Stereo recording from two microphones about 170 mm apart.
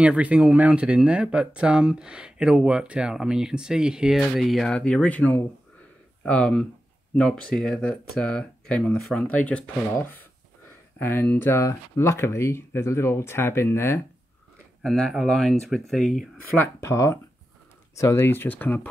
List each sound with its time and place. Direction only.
0.0 s speech: 5° right (ahead or behind); by 14.0 s 15° left (ahead or behind)
14.8 s speech: centre (ahead or behind)
16.6 s speech: 15° left (ahead or behind)